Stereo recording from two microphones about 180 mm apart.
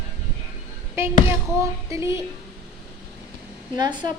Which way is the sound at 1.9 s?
15° right (ahead or behind).